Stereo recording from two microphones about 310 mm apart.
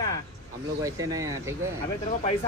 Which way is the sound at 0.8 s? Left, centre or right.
Centre.